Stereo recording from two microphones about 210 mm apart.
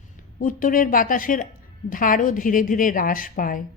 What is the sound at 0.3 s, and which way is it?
A woman's voice, 40° left (ahead or behind).